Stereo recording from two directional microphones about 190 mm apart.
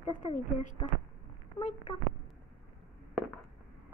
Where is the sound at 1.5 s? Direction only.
35° left (ahead or behind).